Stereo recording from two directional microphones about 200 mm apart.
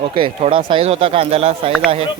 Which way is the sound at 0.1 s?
25° right (ahead or behind).